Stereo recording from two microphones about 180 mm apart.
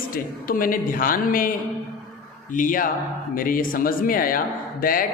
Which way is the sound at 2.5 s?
50° left (ahead or behind).